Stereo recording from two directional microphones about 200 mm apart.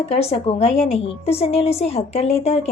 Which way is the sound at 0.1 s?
30° left (ahead or behind).